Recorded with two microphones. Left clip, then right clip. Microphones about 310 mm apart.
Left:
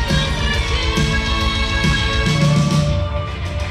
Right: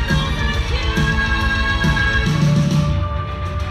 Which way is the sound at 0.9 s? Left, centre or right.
Left.